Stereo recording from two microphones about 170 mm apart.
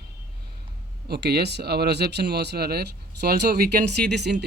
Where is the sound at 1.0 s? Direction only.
70° right (ahead or behind).